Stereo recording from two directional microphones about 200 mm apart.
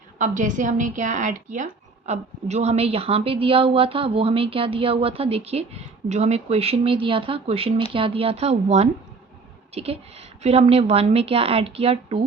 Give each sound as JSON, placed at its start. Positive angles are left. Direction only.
{"t": 0.2, "sound": "a woman's voice", "side_deg": -40}